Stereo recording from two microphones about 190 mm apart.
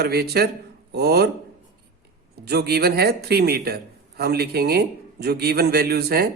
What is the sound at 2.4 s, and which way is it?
Speech, 55° right (ahead or behind).